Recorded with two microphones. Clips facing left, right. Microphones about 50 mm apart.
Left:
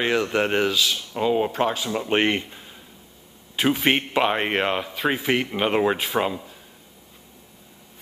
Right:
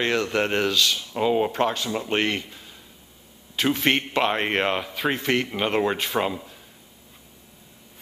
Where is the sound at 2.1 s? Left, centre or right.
Left.